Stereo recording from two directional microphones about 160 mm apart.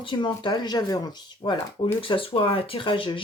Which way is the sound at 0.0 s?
30° left (ahead or behind).